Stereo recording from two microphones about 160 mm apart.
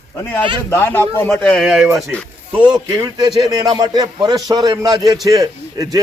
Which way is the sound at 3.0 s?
25° right (ahead or behind).